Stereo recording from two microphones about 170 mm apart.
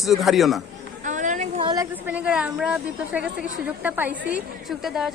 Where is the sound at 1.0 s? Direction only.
45° right (ahead or behind).